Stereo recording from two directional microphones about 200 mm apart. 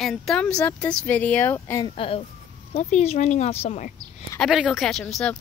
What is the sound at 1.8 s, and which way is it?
Speech, 25° left (ahead or behind).